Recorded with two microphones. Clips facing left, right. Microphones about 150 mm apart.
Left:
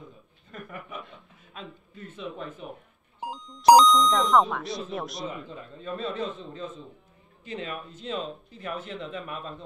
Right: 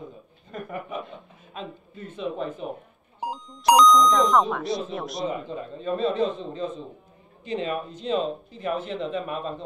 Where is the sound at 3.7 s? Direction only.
30° left (ahead or behind).